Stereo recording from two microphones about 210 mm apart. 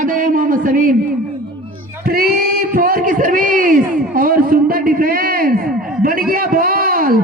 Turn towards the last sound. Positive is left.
turn(degrees=-45)  # may be behind; listen again after turning